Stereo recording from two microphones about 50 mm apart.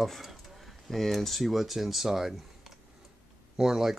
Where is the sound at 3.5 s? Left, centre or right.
Centre.